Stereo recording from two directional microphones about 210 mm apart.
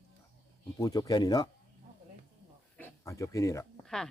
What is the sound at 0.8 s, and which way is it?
Speech, 15° left (ahead or behind).